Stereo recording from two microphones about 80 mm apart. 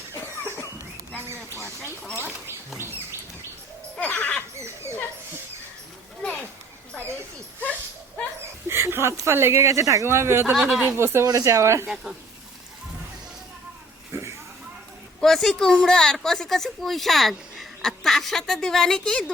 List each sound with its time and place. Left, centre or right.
1.1 s a sound: right
2.7 s bird: right
4.0 s speech: centre
4.5 s children playing: right
8.6 s a sound: right
9.2 s speech: right
10.4 s speech: centre
10.9 s speech: right
11.3 s speech: right
15.2 s speech: centre